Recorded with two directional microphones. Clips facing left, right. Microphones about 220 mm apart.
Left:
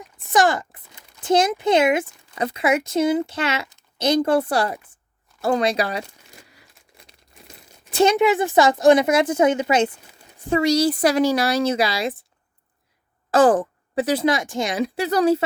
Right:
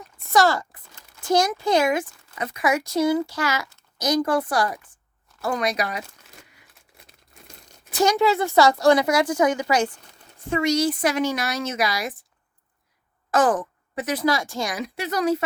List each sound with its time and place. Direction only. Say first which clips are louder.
0.3 s speech: left 1 dB; 15° left (ahead or behind)
7.3 s crunch: left 2 dB; centre (ahead or behind)
7.9 s speech: left 3 dB; 20° left (ahead or behind)
10.5 s speech: left 3 dB; 35° left (ahead or behind)
13.3 s speech: left 5 dB; 30° left (ahead or behind)